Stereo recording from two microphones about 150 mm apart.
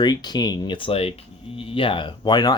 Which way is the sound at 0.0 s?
30° left (ahead or behind).